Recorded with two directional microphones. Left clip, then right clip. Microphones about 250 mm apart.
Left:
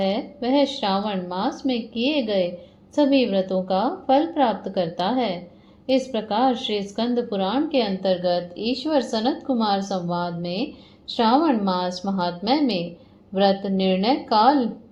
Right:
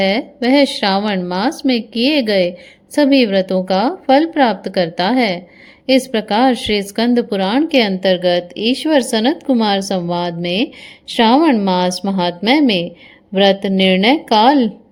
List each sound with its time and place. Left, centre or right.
0.0 s a woman's voice: right